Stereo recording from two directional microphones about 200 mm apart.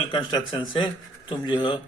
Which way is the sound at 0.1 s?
25° left (ahead or behind).